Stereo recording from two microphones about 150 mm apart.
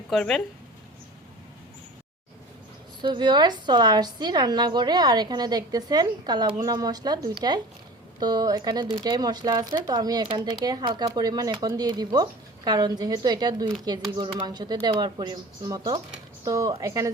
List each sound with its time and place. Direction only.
0.1 s speech: 5° left (ahead or behind)
3.0 s a woman's voice: 30° right (ahead or behind)